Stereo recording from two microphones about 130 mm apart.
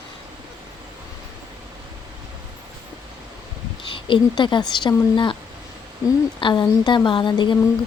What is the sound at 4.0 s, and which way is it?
Speech, 40° left (ahead or behind).